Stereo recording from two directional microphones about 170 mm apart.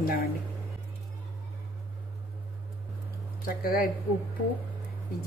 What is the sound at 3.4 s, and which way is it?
Speech, 60° left (ahead or behind).